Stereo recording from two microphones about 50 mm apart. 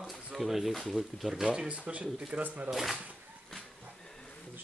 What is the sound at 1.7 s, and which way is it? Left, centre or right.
Speech, right.